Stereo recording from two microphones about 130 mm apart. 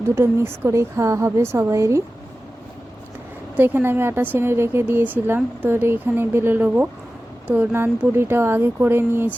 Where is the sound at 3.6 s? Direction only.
15° right (ahead or behind).